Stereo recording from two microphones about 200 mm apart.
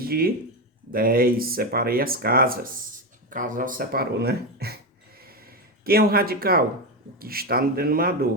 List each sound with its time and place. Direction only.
0.0 s speech: 50° right (ahead or behind)
5.8 s speech: 50° right (ahead or behind)